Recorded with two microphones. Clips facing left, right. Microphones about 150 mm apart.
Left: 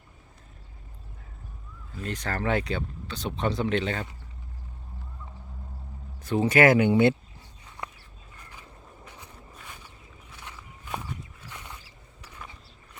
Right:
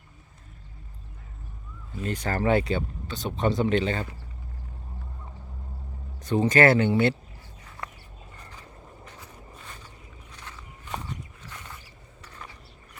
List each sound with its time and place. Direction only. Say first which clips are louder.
2.0 s speech: right 3 dB; 5° right (ahead or behind)
6.1 s speech: even; 5° left (ahead or behind)
9.0 s a sound: right 1 dB; 15° left (ahead or behind)
10.3 s walk: left 1 dB; 10° left (ahead or behind)